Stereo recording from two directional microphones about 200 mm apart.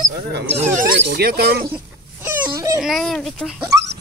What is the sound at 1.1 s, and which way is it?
Speech, 50° right (ahead or behind).